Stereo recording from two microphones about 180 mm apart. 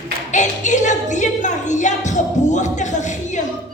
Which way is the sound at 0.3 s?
45° left (ahead or behind).